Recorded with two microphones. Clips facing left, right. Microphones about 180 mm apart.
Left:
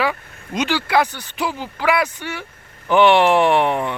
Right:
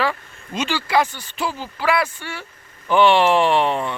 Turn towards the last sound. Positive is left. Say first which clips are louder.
# left 2 dB
turn(degrees=15)  # may be behind; listen again after turning